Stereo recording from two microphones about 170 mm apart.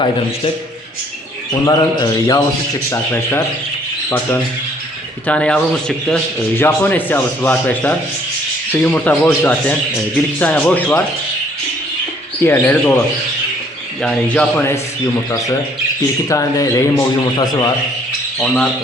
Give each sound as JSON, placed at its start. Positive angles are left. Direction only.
{"t": 1.6, "sound": "a man's voice", "side_deg": 20}
{"t": 5.2, "sound": "speech", "side_deg": 5}
{"t": 6.6, "sound": "speech", "side_deg": 10}
{"t": 12.4, "sound": "speech", "side_deg": 15}
{"t": 14.0, "sound": "speech", "side_deg": 5}
{"t": 15.1, "sound": "a man's voice", "side_deg": 20}
{"t": 18.4, "sound": "speech", "side_deg": 5}